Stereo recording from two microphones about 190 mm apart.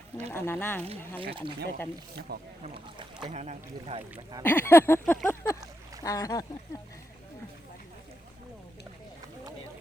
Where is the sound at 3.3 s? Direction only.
35° right (ahead or behind).